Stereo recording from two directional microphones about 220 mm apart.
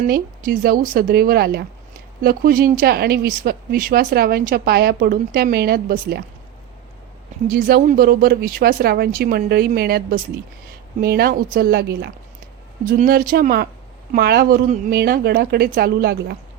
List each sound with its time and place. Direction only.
0.1 s speech: 40° right (ahead or behind)
7.4 s speech: 45° right (ahead or behind)